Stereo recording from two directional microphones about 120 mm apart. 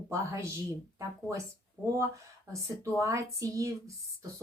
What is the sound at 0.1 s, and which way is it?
Speech, 20° right (ahead or behind).